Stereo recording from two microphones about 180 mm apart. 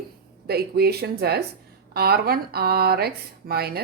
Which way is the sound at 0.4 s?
60° right (ahead or behind).